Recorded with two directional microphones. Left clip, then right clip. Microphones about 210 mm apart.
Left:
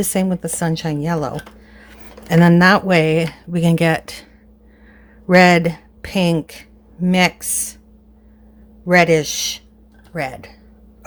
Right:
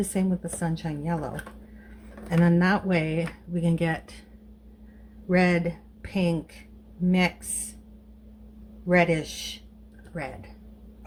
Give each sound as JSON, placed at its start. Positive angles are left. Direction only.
{"t": 0.0, "sound": "speech", "side_deg": 50}
{"t": 2.3, "sound": "speech", "side_deg": 50}
{"t": 5.3, "sound": "speech", "side_deg": 50}
{"t": 8.9, "sound": "speech", "side_deg": 45}